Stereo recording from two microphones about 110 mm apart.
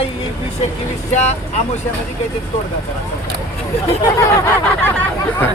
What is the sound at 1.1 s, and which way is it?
Speech, 90° left.